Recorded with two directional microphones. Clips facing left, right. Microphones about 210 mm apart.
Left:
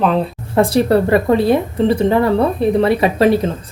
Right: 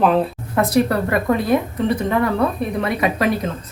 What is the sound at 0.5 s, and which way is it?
Speech, 30° left (ahead or behind).